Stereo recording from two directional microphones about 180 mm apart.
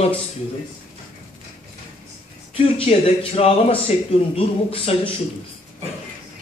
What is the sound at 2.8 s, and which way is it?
Speech, 35° left (ahead or behind).